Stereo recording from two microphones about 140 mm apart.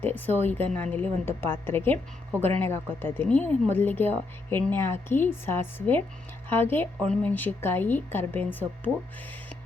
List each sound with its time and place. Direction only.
0.0 s a woman's voice: 15° left (ahead or behind)